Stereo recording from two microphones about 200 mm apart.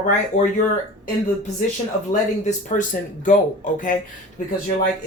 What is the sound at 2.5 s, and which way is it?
Speech, 35° left (ahead or behind).